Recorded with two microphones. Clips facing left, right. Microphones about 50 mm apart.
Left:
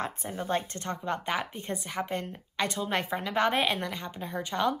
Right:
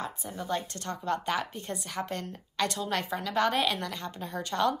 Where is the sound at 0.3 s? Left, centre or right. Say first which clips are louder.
Left 2 dB; left.